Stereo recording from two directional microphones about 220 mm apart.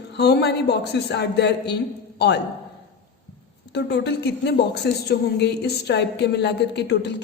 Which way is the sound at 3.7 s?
50° left (ahead or behind).